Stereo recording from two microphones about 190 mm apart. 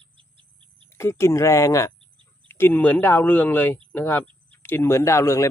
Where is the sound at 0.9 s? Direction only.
15° left (ahead or behind).